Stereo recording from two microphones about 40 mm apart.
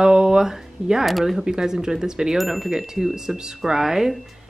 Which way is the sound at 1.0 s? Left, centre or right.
Centre.